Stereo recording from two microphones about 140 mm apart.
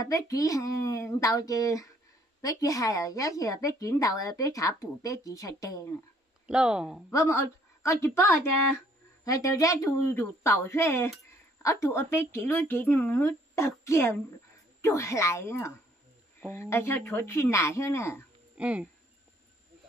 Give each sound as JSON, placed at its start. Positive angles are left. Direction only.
{"t": 0.0, "sound": "speech", "side_deg": 25}
{"t": 6.4, "sound": "speech", "side_deg": -5}
{"t": 7.1, "sound": "speech", "side_deg": 20}
{"t": 18.6, "sound": "speech", "side_deg": -10}